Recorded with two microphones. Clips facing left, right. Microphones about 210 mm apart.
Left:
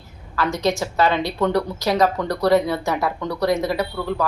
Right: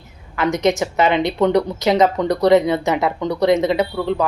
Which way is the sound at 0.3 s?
20° right (ahead or behind).